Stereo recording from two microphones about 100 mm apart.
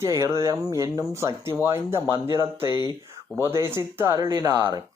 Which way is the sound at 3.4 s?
25° right (ahead or behind).